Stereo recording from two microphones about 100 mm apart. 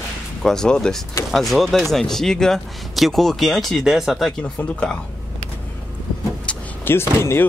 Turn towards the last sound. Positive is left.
turn(degrees=25)  # may be behind; listen again after turning